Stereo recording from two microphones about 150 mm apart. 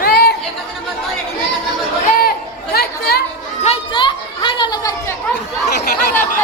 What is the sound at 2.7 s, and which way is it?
Speech, 90° left.